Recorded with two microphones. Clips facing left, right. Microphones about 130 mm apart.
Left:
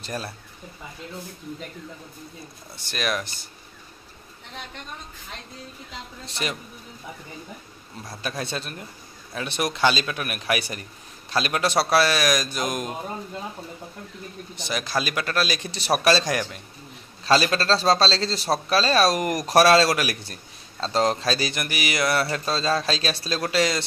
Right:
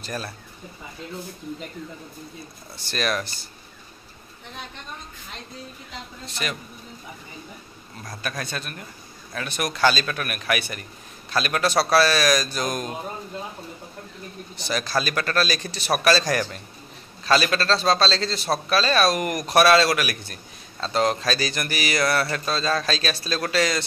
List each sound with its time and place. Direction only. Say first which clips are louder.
0.0 s speech: even; 25° left (ahead or behind)
2.9 s speech: right 1 dB; 10° left (ahead or behind)
6.2 s a man's voice: left 1 dB; 30° left (ahead or behind)
8.2 s a man's voice: left 1 dB; 25° left (ahead or behind)
14.7 s speech: right 2 dB; 15° left (ahead or behind)
15.7 s a man's voice: left 1 dB; 30° left (ahead or behind)
17.2 s a man's voice: left 1 dB; 30° left (ahead or behind)